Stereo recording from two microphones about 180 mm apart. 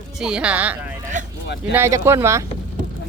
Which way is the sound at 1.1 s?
45° right (ahead or behind).